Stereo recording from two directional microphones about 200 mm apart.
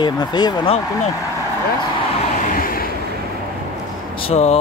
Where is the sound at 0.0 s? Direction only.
20° left (ahead or behind).